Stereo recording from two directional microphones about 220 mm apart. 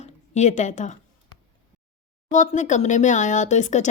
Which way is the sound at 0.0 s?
35° left (ahead or behind).